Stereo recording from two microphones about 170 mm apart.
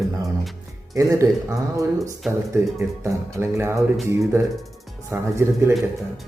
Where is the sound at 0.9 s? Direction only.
20° right (ahead or behind).